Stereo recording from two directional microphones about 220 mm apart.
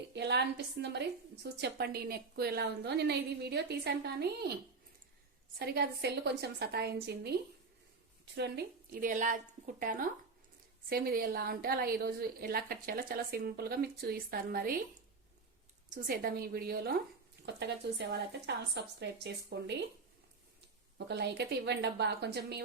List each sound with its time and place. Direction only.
0.1 s a woman's voice: 50° right (ahead or behind)
5.5 s a woman's voice: 45° right (ahead or behind)
15.9 s a woman's voice: 40° right (ahead or behind)
21.1 s a woman's voice: 50° right (ahead or behind)